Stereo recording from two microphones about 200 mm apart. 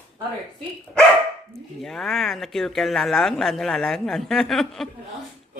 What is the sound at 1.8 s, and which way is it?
Speech, centre (ahead or behind).